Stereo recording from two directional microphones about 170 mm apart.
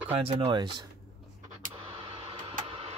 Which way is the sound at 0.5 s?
25° right (ahead or behind).